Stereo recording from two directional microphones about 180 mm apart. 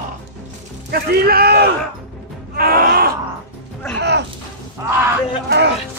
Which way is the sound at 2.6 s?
55° right (ahead or behind).